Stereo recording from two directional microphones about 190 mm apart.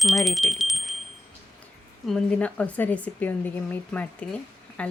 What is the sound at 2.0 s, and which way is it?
Speech, 5° left (ahead or behind).